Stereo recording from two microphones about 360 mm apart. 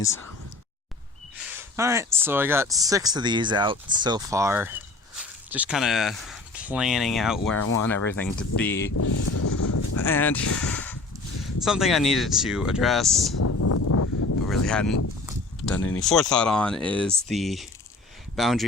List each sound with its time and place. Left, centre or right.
1.5 s speech: centre
7.5 s speech: left
7.9 s speech: centre
9.0 s a sound: left
10.0 s speech: centre
13.4 s a sound: left
14.4 s speech: centre
15.3 s a sound: centre
15.8 s speech: left
16.0 s speech: centre